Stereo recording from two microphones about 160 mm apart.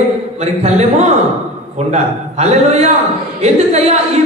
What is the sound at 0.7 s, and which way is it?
A man's voice, 45° right (ahead or behind).